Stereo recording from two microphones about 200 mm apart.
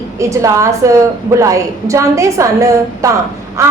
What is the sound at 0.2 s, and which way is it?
A woman's voice, 15° right (ahead or behind).